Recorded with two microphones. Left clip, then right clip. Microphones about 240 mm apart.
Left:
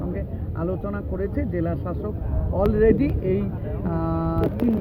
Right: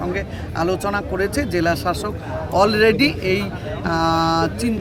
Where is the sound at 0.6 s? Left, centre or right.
Centre.